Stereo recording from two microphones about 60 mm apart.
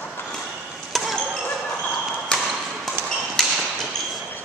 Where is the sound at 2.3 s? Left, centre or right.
Centre.